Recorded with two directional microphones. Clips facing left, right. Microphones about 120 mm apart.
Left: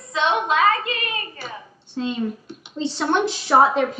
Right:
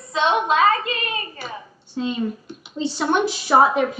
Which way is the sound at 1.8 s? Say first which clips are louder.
Right 1 dB; 10° right (ahead or behind).